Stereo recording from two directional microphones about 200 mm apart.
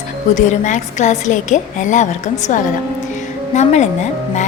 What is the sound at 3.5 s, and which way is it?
Speech, 35° left (ahead or behind).